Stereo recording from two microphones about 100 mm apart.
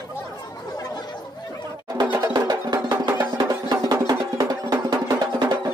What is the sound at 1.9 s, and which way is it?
Music, 40° right (ahead or behind).